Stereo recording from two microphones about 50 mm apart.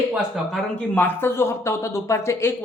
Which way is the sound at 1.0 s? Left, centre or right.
Left.